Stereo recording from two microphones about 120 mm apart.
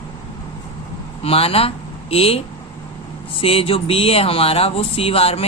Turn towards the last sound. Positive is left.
turn(degrees=55)  # may be behind; listen again after turning